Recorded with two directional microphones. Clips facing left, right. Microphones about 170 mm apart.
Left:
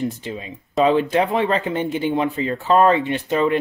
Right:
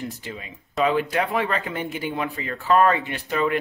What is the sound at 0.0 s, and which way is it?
Speech, 20° left (ahead or behind).